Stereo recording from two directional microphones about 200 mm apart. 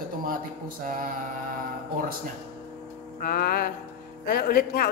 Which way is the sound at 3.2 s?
45° left (ahead or behind).